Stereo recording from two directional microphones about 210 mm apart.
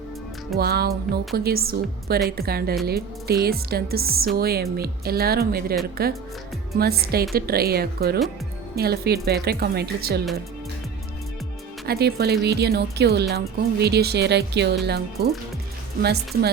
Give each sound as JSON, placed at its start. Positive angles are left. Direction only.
{"t": 0.5, "sound": "speech", "side_deg": -50}
{"t": 11.9, "sound": "speech", "side_deg": -50}